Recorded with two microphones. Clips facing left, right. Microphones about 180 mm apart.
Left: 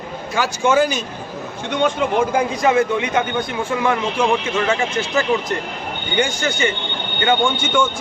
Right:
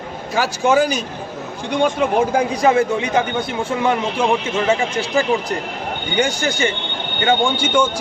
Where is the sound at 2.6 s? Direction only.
30° right (ahead or behind).